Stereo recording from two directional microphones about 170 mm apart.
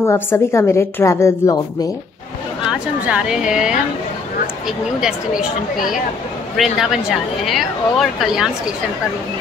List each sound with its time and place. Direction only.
0.0 s a woman's voice: 15° left (ahead or behind)
2.7 s a woman's voice: 5° right (ahead or behind)